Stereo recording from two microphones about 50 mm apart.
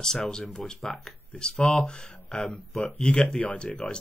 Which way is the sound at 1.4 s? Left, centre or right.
Centre.